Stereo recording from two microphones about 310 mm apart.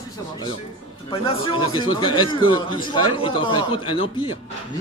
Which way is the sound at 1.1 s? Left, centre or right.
Centre.